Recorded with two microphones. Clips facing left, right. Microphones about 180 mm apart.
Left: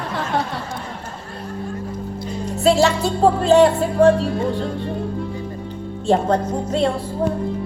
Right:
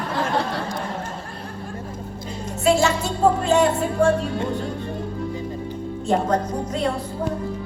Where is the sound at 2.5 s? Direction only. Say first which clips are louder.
Left 3 dB; 35° left (ahead or behind).